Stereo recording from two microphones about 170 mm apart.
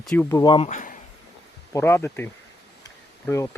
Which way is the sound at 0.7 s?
50° left (ahead or behind).